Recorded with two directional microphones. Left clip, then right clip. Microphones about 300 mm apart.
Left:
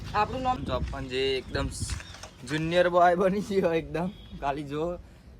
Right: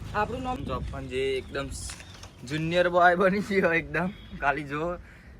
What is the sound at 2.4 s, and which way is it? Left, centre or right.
Speech, left.